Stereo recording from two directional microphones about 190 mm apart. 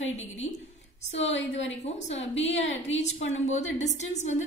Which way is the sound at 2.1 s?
35° left (ahead or behind).